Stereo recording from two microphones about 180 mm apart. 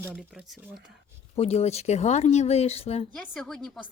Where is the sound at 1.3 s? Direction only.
35° left (ahead or behind).